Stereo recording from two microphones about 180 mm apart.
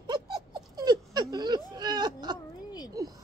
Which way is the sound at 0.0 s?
25° right (ahead or behind).